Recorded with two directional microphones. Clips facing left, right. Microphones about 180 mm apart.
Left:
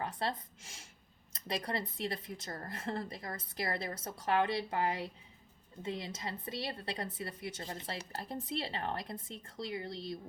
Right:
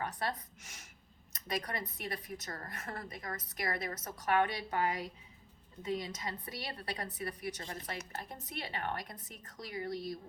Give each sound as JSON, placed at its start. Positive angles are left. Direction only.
{"t": 0.0, "sound": "speech", "side_deg": 25}